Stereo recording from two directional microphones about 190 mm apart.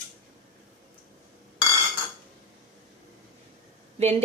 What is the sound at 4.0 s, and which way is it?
Speech, 35° right (ahead or behind).